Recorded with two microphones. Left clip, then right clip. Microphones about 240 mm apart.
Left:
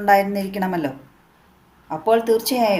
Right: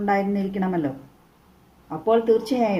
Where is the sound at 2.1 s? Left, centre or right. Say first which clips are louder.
Left 2 dB; left.